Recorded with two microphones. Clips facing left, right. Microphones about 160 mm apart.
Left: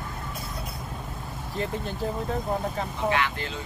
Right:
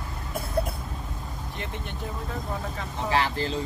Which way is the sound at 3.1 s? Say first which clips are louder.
Right 2 dB; 35° right (ahead or behind).